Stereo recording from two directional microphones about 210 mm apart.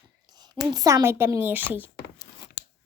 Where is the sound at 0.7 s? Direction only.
15° right (ahead or behind).